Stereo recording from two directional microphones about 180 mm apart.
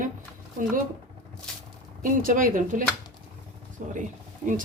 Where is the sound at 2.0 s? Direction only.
50° right (ahead or behind).